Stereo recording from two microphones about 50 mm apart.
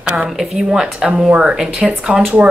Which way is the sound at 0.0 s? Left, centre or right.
Centre.